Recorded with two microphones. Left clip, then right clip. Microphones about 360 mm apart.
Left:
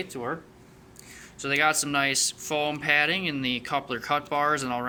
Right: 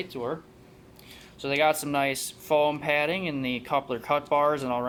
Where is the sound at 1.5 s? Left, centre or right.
Centre.